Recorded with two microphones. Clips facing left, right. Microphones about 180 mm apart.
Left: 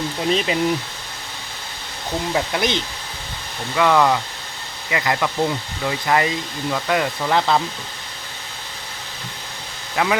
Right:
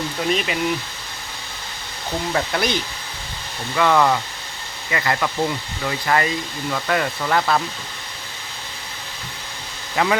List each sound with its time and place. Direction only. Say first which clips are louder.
0.3 s speech: left 2 dB; 30° left (ahead or behind)
2.3 s speech: left 1 dB; 15° left (ahead or behind)
3.8 s speech: left 1 dB; 5° left (ahead or behind)
9.9 s speech: right 1 dB; 5° left (ahead or behind)